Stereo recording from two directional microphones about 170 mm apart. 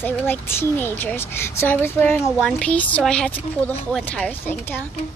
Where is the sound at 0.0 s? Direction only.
10° left (ahead or behind).